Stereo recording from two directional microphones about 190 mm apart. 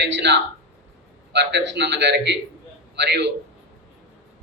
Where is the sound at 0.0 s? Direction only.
65° right (ahead or behind).